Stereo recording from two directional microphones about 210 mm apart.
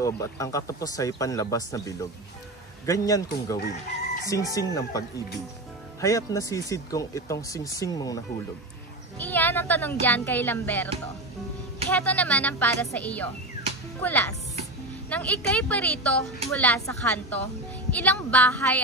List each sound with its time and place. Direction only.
0.0 s a woman's voice: 15° left (ahead or behind)
3.5 s speech: 50° left (ahead or behind)
4.3 s a woman's voice: 15° left (ahead or behind)
9.2 s a woman's voice: 10° left (ahead or behind)
11.9 s a woman's voice: 5° left (ahead or behind)